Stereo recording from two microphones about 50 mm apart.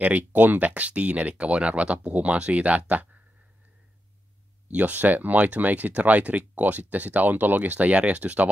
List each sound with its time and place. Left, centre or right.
0.3 s speech: right
4.6 s speech: right